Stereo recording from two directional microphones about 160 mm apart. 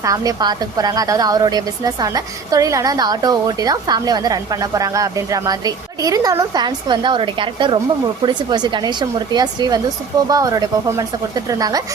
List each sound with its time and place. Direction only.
0.0 s a woman's voice: 20° right (ahead or behind)